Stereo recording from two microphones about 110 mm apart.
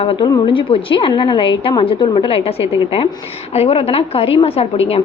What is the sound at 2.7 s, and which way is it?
Speech, 55° left (ahead or behind).